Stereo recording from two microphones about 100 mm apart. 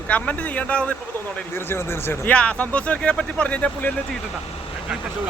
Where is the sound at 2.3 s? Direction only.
15° left (ahead or behind).